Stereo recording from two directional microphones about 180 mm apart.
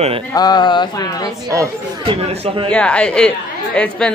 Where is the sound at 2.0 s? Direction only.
30° right (ahead or behind).